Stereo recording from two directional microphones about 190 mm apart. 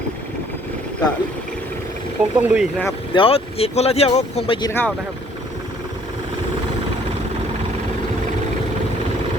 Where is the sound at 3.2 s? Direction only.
30° left (ahead or behind).